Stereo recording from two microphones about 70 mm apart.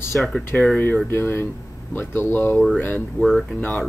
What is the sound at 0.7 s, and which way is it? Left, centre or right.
Speech, left.